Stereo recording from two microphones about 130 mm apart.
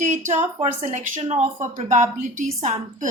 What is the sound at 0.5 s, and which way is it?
Speech, 60° right (ahead or behind).